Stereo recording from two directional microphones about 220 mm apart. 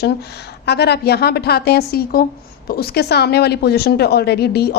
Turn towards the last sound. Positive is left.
turn(degrees=45)  # may be behind; listen again after turning